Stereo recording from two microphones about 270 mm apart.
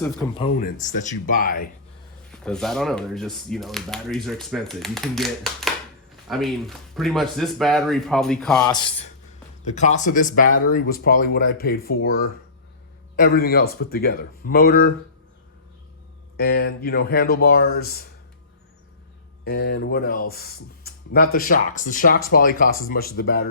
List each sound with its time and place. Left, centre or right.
0.6 s speech: left
2.3 s speech: centre
8.6 s speech: centre
9.6 s speech: left
16.4 s speech: left
19.5 s speech: left